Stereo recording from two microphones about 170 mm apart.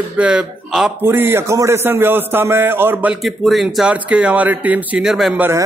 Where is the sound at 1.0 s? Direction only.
15° right (ahead or behind).